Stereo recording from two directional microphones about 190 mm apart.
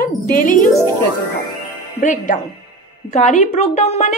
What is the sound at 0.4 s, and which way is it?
Speech, 45° left (ahead or behind).